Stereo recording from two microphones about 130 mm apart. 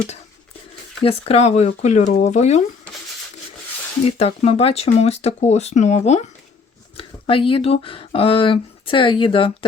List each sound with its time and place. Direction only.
1.0 s speech: 50° left (ahead or behind)
4.0 s speech: 55° left (ahead or behind)
6.9 s speech: 45° left (ahead or behind)